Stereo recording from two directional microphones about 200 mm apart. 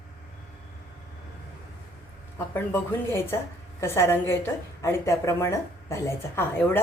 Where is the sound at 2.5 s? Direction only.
10° left (ahead or behind).